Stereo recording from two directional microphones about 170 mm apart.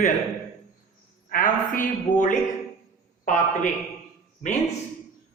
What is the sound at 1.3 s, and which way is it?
A man's voice, 55° left (ahead or behind).